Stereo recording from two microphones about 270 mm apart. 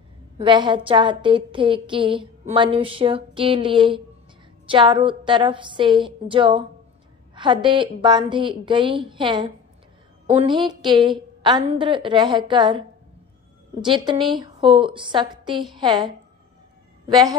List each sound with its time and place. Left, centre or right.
0.4 s a woman's voice: centre